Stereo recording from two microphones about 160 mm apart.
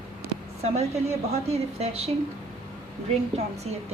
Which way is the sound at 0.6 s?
40° right (ahead or behind).